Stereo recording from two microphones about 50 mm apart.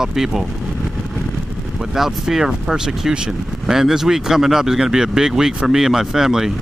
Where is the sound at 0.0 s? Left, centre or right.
Centre.